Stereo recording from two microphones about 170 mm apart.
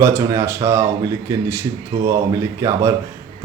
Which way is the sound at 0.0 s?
15° right (ahead or behind).